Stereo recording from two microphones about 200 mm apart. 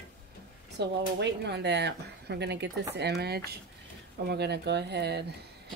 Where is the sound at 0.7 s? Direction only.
60° right (ahead or behind).